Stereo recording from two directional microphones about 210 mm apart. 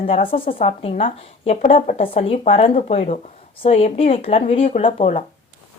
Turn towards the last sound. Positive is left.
turn(degrees=30)  # may be behind; listen again after turning